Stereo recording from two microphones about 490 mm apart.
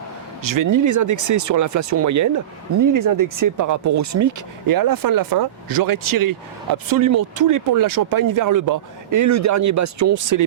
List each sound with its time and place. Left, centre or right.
0.4 s speech: right